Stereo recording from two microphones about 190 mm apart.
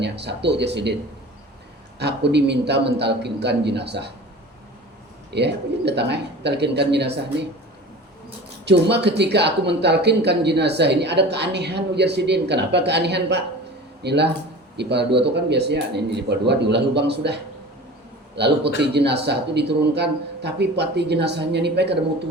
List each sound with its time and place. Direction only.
0.0 s speech: 65° right (ahead or behind)
2.0 s speech: 65° right (ahead or behind)
5.3 s speech: 60° right (ahead or behind)
8.6 s speech: 65° right (ahead or behind)